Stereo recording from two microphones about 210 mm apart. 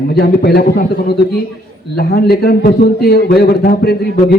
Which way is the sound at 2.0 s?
45° left (ahead or behind).